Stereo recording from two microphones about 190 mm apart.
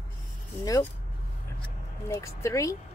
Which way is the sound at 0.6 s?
15° left (ahead or behind).